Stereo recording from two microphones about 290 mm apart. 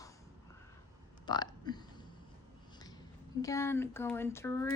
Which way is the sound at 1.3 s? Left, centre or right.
Centre.